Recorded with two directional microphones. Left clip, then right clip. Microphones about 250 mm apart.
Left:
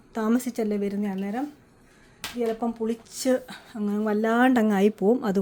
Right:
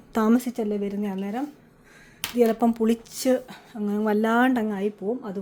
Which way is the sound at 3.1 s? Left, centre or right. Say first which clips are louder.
Right 1 dB; centre.